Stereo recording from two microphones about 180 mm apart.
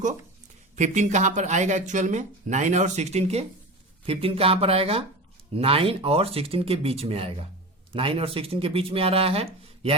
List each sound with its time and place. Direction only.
0.8 s speech: 40° right (ahead or behind)